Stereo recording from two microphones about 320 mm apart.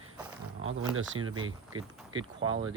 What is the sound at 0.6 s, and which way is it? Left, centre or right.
Speech, right.